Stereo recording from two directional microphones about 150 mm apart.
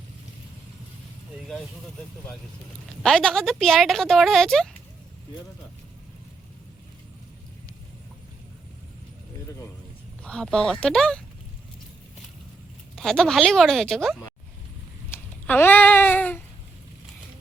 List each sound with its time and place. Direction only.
3.0 s speech: 5° left (ahead or behind)
10.2 s speech: 5° left (ahead or behind)
13.0 s speech: 5° left (ahead or behind)
15.1 s a sound: 15° left (ahead or behind)